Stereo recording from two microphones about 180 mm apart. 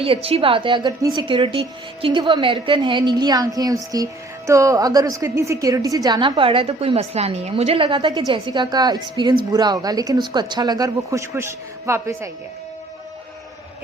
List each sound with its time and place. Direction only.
0.0 s a woman's voice: 30° right (ahead or behind); by 12.3 s 15° right (ahead or behind)